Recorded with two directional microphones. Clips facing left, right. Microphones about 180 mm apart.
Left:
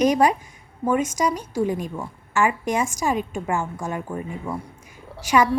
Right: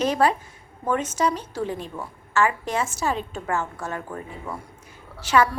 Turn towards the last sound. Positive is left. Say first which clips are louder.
# left 1 dB
turn(degrees=15)  # may be behind; listen again after turning